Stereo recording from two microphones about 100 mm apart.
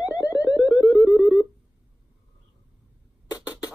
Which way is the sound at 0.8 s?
35° left (ahead or behind).